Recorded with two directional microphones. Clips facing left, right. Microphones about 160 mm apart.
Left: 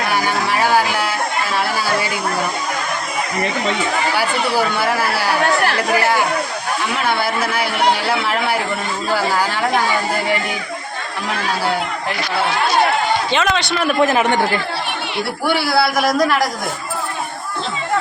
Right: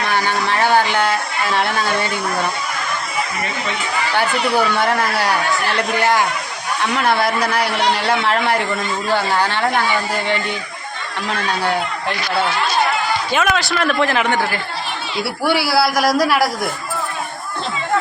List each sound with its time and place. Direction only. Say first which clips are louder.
0.1 s a sound: right 1 dB; 10° left (ahead or behind)
4.2 s a man's voice: right 4 dB; 5° left (ahead or behind)
6.9 s a man's voice: right 3 dB; centre (ahead or behind)
13.3 s a man's voice: even; 5° right (ahead or behind)
14.0 s a man's voice: left 5 dB; 20° left (ahead or behind)
15.4 s a man's voice: right 1 dB; 10° right (ahead or behind)